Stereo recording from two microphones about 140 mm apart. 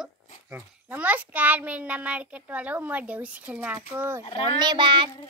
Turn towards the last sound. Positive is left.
turn(degrees=-35)  # may be behind; listen again after turning